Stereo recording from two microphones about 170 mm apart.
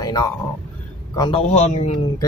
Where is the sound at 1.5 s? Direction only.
40° left (ahead or behind).